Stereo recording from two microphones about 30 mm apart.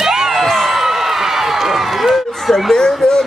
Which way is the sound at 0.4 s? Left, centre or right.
Centre.